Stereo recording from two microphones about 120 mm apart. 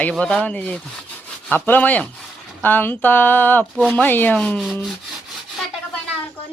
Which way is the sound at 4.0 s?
15° left (ahead or behind).